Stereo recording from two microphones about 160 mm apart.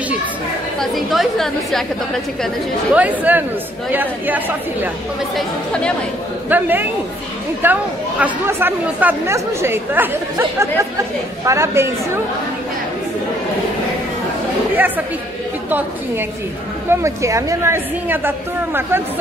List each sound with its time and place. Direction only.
0.7 s a woman's voice: centre (ahead or behind)
5.3 s a woman's voice: 5° left (ahead or behind)
6.5 s speech: 10° right (ahead or behind)
16.9 s speech: 20° right (ahead or behind)